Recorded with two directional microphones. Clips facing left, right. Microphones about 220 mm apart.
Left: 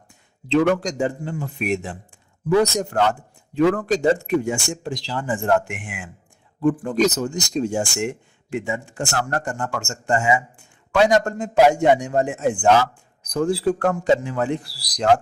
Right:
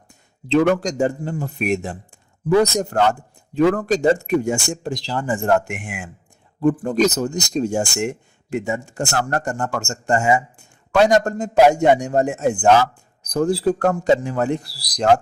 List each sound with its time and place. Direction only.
0.4 s speech: 40° right (ahead or behind)